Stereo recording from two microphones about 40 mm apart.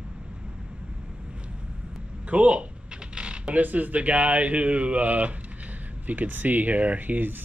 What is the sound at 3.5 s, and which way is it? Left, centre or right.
Speech, right.